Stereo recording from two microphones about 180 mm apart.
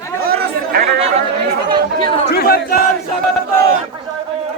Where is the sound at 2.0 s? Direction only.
25° left (ahead or behind).